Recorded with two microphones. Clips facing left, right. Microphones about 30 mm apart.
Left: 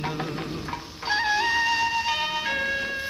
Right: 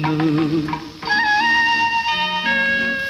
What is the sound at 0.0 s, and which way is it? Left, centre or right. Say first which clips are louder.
Music: right 12 dB; right.